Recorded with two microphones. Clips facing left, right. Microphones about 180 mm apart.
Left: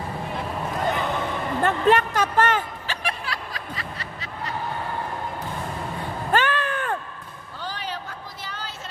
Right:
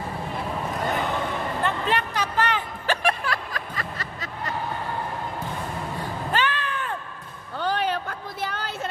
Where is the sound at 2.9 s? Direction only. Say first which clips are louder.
Right 9 dB; 50° right (ahead or behind).